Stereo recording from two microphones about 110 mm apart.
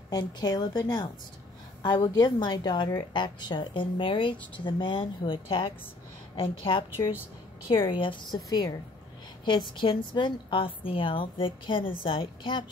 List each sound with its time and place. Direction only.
0.1 s a woman's voice: 40° left (ahead or behind); by 6.8 s 55° left (ahead or behind)
7.9 s a woman's voice: 50° left (ahead or behind)